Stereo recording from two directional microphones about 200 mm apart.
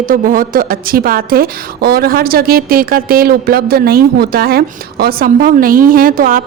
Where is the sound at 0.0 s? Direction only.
45° right (ahead or behind).